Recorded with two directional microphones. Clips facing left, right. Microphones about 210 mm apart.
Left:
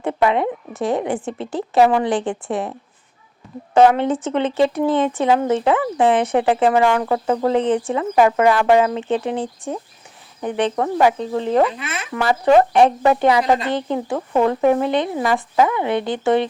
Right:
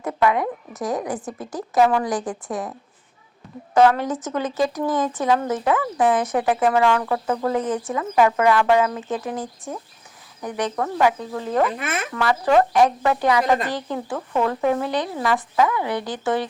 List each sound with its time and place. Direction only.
0.0 s a woman's voice: 25° left (ahead or behind)
3.8 s speech: 25° left (ahead or behind)
11.8 s speech: 50° right (ahead or behind)
12.1 s speech: 25° left (ahead or behind)